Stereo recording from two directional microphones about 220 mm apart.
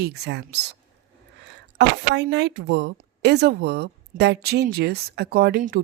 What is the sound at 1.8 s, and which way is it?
A woman's voice, 55° right (ahead or behind).